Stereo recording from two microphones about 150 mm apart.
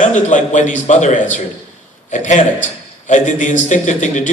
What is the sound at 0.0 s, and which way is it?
A man's voice, 55° left (ahead or behind).